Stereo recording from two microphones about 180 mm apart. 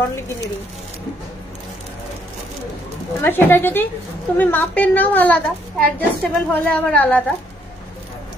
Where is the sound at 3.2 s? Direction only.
10° left (ahead or behind).